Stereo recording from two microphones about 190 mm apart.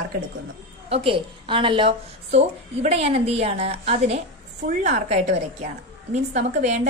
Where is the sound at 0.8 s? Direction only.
30° right (ahead or behind).